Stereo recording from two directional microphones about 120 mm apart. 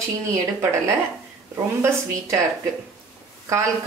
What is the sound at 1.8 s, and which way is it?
Speech, 25° right (ahead or behind).